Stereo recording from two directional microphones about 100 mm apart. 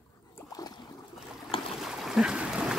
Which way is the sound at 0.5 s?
40° left (ahead or behind).